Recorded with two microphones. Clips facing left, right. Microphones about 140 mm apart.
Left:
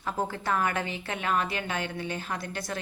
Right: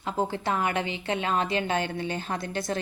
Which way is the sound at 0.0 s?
20° right (ahead or behind).